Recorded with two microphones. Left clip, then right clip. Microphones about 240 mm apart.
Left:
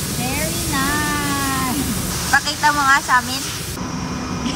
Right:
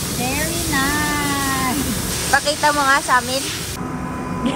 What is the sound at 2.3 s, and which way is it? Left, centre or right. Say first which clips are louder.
Speech: even; centre.